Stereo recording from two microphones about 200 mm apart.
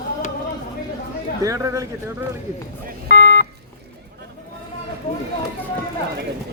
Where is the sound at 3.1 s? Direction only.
55° left (ahead or behind).